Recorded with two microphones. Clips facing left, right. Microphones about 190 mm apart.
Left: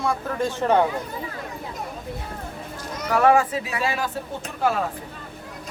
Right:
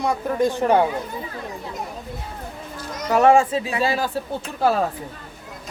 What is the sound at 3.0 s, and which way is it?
Speech, 25° right (ahead or behind).